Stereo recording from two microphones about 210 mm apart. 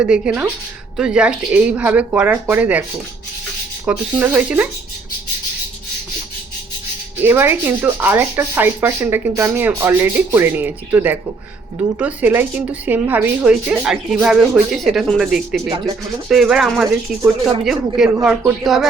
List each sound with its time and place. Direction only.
0.0 s rub: 5° right (ahead or behind)
3.8 s rub: 5° right (ahead or behind)
7.2 s rub: 10° right (ahead or behind)
11.9 s speech: 10° right (ahead or behind)